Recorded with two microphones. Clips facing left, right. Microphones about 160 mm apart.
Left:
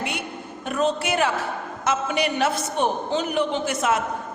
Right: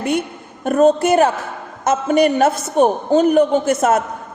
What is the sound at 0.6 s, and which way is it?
A woman's voice, 45° right (ahead or behind).